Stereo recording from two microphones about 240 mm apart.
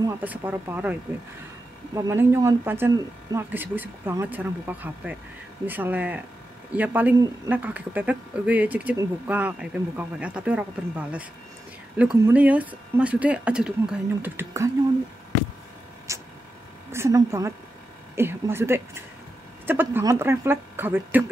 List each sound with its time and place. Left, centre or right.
0.0 s speech: centre
2.0 s speech: centre
16.1 s a sound: centre
16.9 s speech: centre